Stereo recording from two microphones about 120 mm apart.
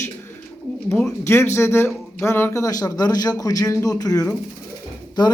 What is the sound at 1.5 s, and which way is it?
Speech, 20° left (ahead or behind).